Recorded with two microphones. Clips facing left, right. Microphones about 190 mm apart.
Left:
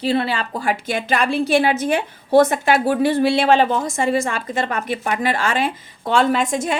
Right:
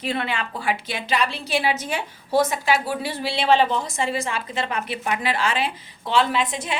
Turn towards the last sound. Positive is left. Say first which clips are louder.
# left 6 dB
turn(degrees=45)  # may be behind; listen again after turning